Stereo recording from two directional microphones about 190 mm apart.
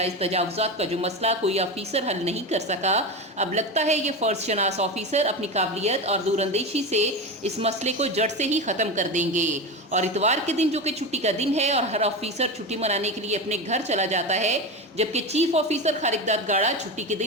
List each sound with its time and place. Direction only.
0.0 s a woman's voice: 35° right (ahead or behind)